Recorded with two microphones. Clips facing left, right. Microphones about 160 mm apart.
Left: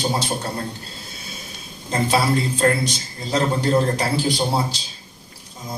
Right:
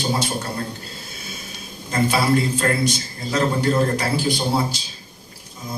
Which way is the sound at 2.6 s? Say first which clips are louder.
Left 1 dB; 30° left (ahead or behind).